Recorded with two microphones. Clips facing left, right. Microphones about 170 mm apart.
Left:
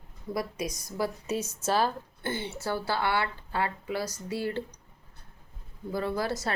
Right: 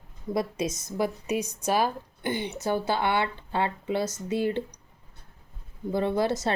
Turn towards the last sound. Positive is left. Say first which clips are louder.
# right 5 dB
turn(degrees=-25)  # may be behind; listen again after turning